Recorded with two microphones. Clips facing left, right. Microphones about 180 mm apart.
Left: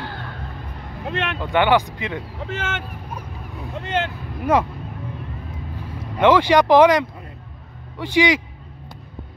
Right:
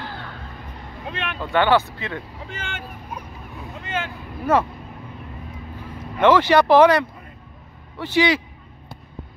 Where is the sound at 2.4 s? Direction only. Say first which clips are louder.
Left 6 dB; 75° left (ahead or behind).